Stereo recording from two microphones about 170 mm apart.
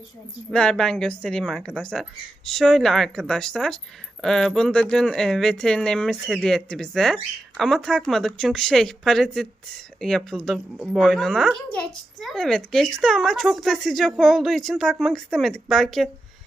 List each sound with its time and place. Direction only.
0.5 s a woman's voice: 5° left (ahead or behind)